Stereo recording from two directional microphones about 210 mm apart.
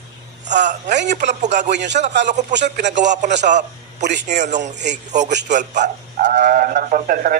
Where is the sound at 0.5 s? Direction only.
35° right (ahead or behind).